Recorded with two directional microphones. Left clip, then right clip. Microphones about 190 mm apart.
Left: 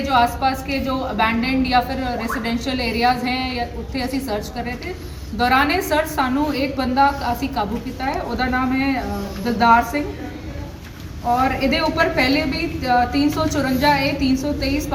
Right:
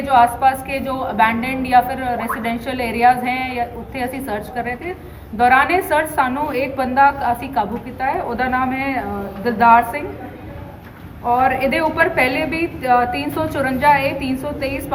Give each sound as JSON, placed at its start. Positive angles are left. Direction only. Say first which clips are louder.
{"t": 0.1, "sound": "a woman's voice", "louder": "right 5 dB", "side_deg": 0}
{"t": 11.3, "sound": "a woman's voice", "louder": "right 3 dB", "side_deg": 0}